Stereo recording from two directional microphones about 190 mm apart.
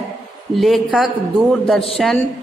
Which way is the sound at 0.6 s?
Centre (ahead or behind).